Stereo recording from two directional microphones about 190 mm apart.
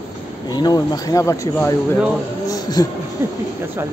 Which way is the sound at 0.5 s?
20° left (ahead or behind).